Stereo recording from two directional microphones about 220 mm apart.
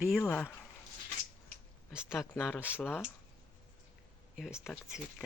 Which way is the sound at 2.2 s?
10° left (ahead or behind).